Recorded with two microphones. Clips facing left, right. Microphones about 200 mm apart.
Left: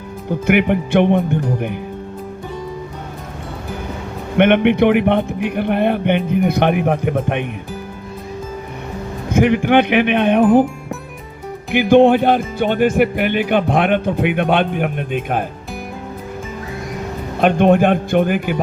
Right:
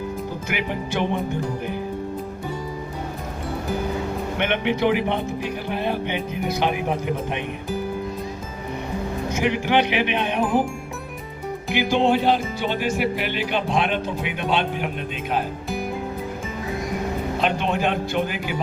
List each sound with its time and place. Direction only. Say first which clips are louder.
0.4 s speech: left 15 dB; 60° left (ahead or behind)
4.4 s speech: left 12 dB; 60° left (ahead or behind)
9.3 s speech: left 8 dB; 55° left (ahead or behind)
11.7 s speech: left 9 dB; 55° left (ahead or behind)
17.4 s speech: left 11 dB; 55° left (ahead or behind)